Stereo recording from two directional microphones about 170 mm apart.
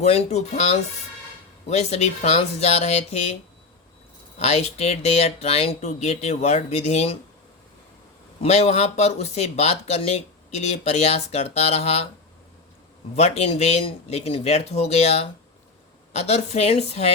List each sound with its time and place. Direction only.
0.0 s speech: 40° left (ahead or behind)
4.4 s speech: 40° left (ahead or behind)
8.4 s speech: 40° left (ahead or behind)
13.1 s speech: 40° left (ahead or behind)